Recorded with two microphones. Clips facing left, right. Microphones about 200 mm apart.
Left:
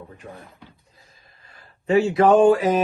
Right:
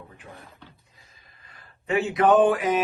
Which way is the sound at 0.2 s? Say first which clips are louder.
Left 6 dB; 50° left (ahead or behind).